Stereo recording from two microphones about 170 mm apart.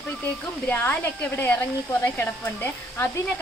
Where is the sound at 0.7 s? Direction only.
10° left (ahead or behind).